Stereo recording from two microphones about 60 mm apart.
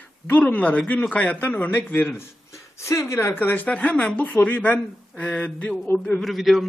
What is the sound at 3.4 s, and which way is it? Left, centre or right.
A man's voice, left.